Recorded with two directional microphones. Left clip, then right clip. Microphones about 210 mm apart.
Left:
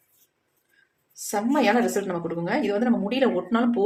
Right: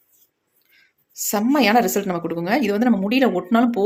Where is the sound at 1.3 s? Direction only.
35° right (ahead or behind).